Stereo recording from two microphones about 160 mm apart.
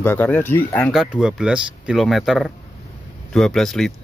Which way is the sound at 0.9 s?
Centre (ahead or behind).